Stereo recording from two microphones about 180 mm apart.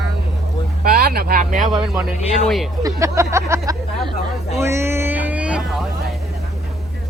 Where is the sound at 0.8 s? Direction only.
55° right (ahead or behind).